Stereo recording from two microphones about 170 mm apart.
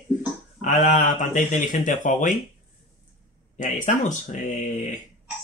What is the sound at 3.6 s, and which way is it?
Speech, 50° left (ahead or behind).